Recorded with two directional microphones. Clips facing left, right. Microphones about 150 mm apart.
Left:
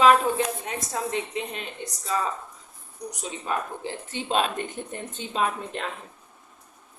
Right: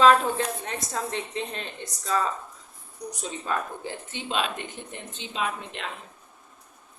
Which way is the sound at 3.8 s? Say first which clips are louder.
Left 3 dB; 35° left (ahead or behind).